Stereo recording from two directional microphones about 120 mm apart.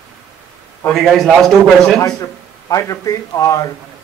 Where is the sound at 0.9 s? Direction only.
Centre (ahead or behind).